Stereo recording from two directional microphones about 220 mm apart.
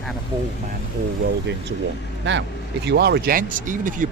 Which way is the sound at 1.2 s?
50° right (ahead or behind).